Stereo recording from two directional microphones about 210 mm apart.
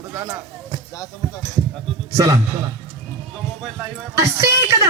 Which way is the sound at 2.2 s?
15° right (ahead or behind).